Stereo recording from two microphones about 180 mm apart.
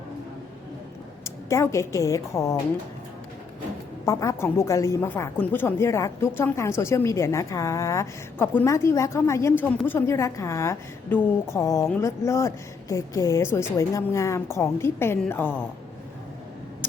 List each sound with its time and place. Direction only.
1.2 s a woman's voice: 15° left (ahead or behind)
4.0 s a woman's voice: 20° left (ahead or behind)